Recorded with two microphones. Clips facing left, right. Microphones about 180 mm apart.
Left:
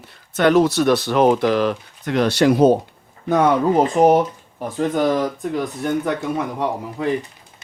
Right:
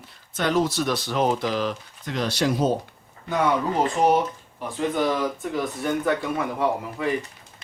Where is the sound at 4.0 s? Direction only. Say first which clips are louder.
Left 4 dB; 55° left (ahead or behind).